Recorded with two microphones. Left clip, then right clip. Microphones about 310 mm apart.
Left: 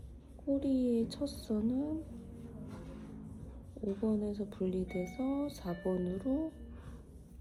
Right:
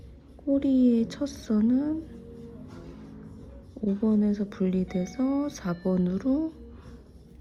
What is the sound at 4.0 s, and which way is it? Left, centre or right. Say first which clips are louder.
Speech: right 9 dB; right.